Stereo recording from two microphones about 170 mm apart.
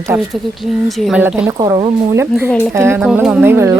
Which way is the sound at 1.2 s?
15° right (ahead or behind).